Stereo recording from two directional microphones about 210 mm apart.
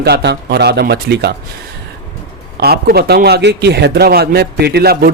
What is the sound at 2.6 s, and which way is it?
A man's voice, 50° right (ahead or behind).